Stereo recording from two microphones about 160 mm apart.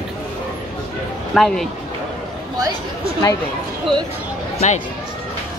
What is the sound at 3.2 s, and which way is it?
Speech, 25° left (ahead or behind).